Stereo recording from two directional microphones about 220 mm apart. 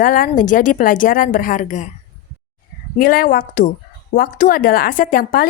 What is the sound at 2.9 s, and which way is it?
Speech, 40° left (ahead or behind).